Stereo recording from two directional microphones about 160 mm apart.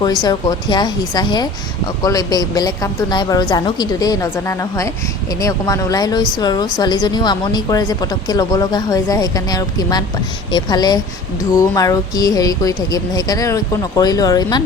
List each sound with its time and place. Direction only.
0.0 s speech: 25° left (ahead or behind)